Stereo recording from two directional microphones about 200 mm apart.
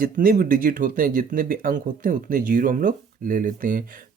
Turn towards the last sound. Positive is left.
turn(degrees=-40)  # may be behind; listen again after turning